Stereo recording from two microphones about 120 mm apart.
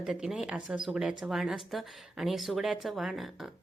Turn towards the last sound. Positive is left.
turn(degrees=0)  # may be behind; listen again after turning